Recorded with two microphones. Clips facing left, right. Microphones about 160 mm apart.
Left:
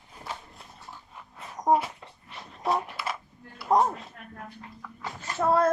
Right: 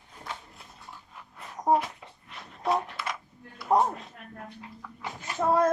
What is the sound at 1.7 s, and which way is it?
Dog, centre (ahead or behind).